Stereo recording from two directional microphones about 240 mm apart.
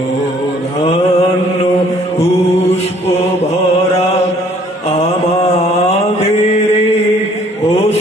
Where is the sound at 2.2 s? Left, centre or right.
Left.